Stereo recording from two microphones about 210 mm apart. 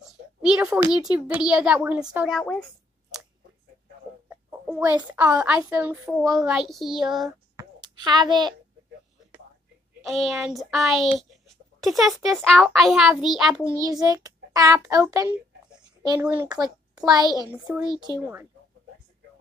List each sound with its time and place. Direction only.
0.4 s a child's voice: 5° right (ahead or behind)
4.3 s a child's voice: 5° right (ahead or behind)
7.5 s a sound: 20° right (ahead or behind)
10.0 s a child's voice: centre (ahead or behind)
13.7 s a child's voice: 15° right (ahead or behind)